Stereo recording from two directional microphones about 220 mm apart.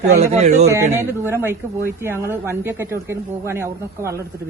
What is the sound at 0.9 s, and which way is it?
Speech, 10° right (ahead or behind).